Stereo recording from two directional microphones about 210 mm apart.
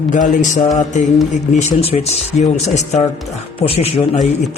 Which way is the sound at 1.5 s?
30° left (ahead or behind).